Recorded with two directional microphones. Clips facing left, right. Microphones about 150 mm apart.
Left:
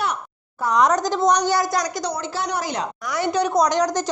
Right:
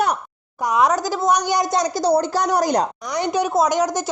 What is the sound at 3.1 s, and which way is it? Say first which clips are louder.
Speech: even; 15° right (ahead or behind).